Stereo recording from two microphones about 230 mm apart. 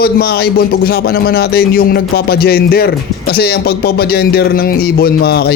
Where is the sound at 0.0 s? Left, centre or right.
Left.